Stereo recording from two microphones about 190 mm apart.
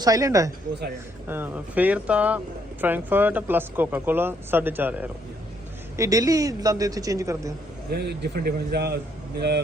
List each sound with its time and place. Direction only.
0.0 s speech: 20° right (ahead or behind)
7.9 s speech: 60° right (ahead or behind)